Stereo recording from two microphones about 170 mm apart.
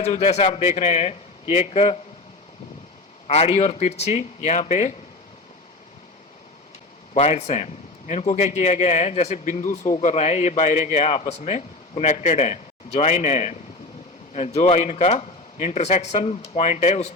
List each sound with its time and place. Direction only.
0.0 s a man's voice: 40° left (ahead or behind)
3.2 s a man's voice: 35° left (ahead or behind)
7.1 s a man's voice: 40° left (ahead or behind)